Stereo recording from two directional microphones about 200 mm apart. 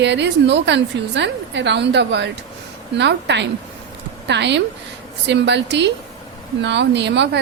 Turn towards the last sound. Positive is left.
turn(degrees=-60)  # may be behind; listen again after turning